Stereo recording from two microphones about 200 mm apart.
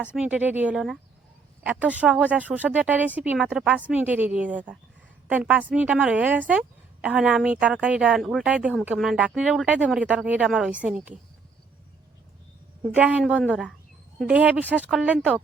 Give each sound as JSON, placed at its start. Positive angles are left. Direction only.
{"t": 0.2, "sound": "a woman's voice", "side_deg": -5}
{"t": 12.8, "sound": "a woman's voice", "side_deg": -5}